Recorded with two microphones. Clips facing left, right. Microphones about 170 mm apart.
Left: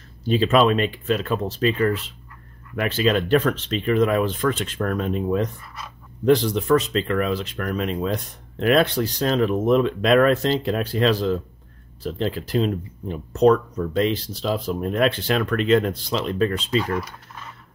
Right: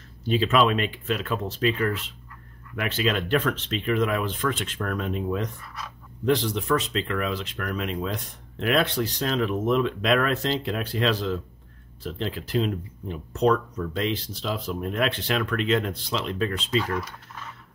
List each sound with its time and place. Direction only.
0.3 s speech: 40° left (ahead or behind)
16.8 s speech: 15° left (ahead or behind)